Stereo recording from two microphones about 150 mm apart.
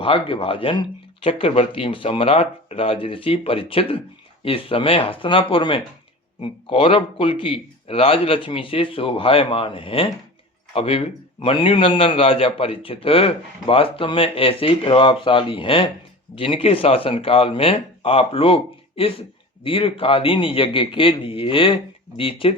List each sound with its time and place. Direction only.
0.0 s a man's voice: 35° left (ahead or behind)